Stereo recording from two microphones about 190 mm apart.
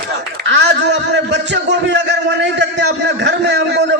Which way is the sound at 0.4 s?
65° right (ahead or behind).